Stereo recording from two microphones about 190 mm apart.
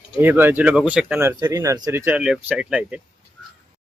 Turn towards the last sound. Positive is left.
turn(degrees=-5)  # may be behind; listen again after turning